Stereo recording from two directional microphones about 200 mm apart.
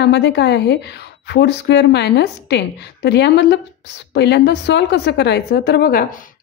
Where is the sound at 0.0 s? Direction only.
60° left (ahead or behind).